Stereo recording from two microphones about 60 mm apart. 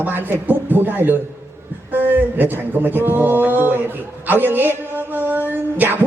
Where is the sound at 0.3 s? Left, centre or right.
Right.